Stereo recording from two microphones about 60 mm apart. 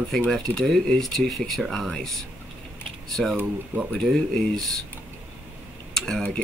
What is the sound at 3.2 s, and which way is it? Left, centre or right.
Speech, centre.